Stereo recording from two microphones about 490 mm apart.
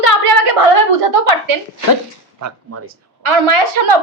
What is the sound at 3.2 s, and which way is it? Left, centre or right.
Speech, right.